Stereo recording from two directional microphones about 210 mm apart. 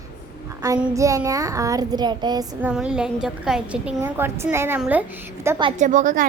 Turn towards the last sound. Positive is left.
turn(degrees=-40)  # may be behind; listen again after turning